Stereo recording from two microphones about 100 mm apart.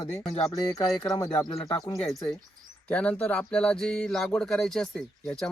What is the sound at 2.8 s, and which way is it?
Speech, 10° left (ahead or behind).